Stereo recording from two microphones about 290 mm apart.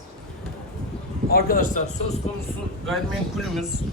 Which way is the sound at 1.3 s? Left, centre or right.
Left.